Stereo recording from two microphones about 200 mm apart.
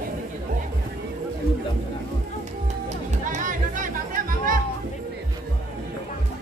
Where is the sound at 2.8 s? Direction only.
35° right (ahead or behind).